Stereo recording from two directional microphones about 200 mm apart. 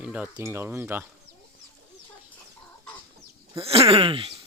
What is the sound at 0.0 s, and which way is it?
Speech, 5° right (ahead or behind).